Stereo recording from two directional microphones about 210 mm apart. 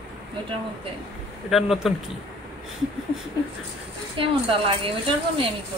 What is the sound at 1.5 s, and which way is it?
Speech, centre (ahead or behind).